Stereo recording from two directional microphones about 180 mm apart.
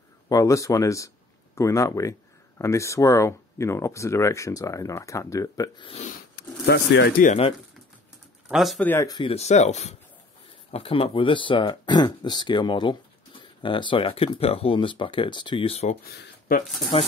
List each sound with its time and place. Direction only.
0.3 s speech: 20° left (ahead or behind)
6.0 s speech: 60° left (ahead or behind)
8.5 s speech: centre (ahead or behind)
8.8 s speech: 15° left (ahead or behind)
9.3 s speech: 40° left (ahead or behind)